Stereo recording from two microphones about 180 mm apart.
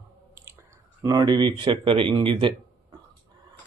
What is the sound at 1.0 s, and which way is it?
Speech, 20° right (ahead or behind).